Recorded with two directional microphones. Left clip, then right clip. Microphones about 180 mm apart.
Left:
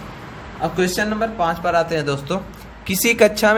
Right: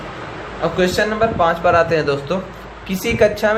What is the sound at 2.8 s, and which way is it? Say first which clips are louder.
Speech: left 1 dB; 50° left (ahead or behind).